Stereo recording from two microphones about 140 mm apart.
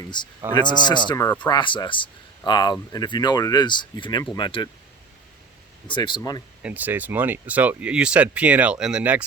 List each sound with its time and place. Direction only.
0.1 s speech: 30° left (ahead or behind)
5.9 s speech: 35° left (ahead or behind)
6.6 s speech: 10° right (ahead or behind)